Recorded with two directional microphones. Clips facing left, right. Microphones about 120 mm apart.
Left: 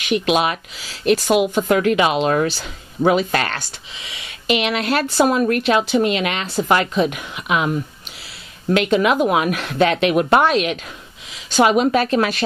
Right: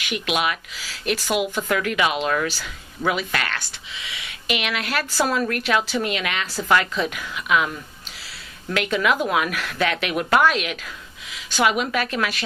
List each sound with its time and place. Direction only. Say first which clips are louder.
0.1 s speech: left 6 dB; 30° left (ahead or behind)